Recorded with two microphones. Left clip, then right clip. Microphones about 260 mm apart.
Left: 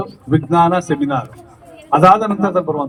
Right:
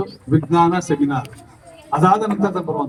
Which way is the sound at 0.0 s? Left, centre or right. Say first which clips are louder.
Left 2 dB; left.